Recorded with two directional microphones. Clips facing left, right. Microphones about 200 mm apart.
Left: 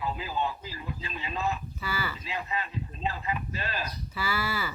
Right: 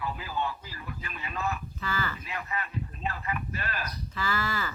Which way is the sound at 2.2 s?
20° left (ahead or behind).